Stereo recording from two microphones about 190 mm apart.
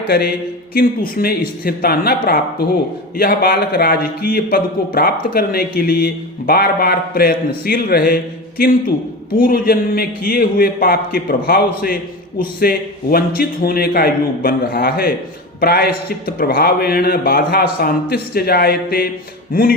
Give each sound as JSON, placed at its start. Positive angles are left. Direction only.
{"t": 0.7, "sound": "a man's voice", "side_deg": 50}